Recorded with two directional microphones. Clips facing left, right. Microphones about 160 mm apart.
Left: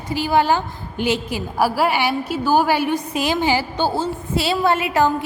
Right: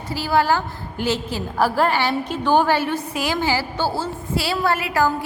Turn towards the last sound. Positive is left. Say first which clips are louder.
# left 2 dB
turn(degrees=25)  # may be behind; listen again after turning